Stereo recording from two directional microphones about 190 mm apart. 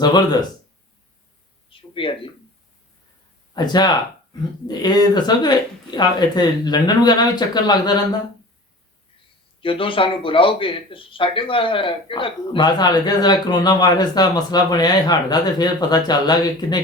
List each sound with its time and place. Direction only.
1.7 s a sound: 25° left (ahead or behind)
3.5 s speech: 20° left (ahead or behind)
9.6 s speech: 25° left (ahead or behind)